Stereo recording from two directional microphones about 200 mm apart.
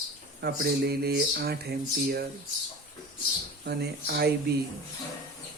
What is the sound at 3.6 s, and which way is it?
Speech, 55° right (ahead or behind).